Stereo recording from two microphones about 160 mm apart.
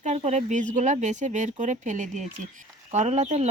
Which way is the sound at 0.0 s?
45° right (ahead or behind).